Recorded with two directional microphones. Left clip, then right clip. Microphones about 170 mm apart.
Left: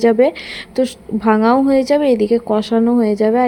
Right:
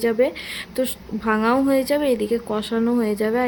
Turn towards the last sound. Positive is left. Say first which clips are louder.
# left 7 dB
turn(degrees=30)  # may be behind; listen again after turning